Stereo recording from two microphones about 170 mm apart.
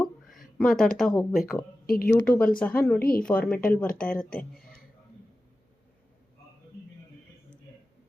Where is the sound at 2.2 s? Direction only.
10° left (ahead or behind).